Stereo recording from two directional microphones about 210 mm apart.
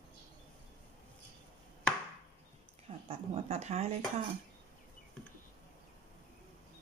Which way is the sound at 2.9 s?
30° right (ahead or behind).